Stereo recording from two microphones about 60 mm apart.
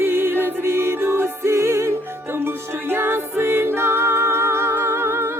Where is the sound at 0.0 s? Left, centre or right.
Right.